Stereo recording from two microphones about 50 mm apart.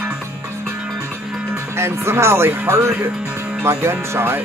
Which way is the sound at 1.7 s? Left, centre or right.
Right.